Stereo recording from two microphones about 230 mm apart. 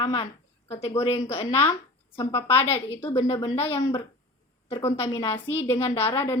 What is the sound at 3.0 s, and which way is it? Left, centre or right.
Speech, left.